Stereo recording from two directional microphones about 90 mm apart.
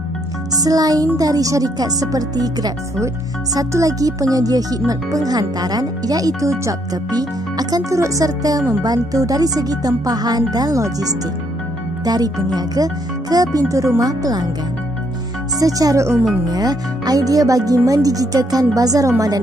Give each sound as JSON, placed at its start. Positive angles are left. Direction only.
{"t": 0.6, "sound": "speech", "side_deg": -45}
{"t": 15.6, "sound": "speech", "side_deg": -40}
{"t": 16.4, "sound": "speech", "side_deg": -50}